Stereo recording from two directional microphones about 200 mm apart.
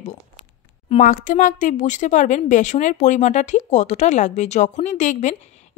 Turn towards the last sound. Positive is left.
turn(degrees=35)  # may be behind; listen again after turning